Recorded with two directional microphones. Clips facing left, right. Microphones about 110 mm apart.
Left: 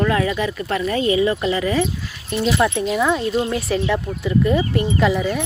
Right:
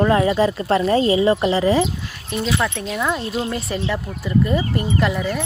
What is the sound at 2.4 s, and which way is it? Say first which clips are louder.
Speech: left 4 dB; 10° left (ahead or behind).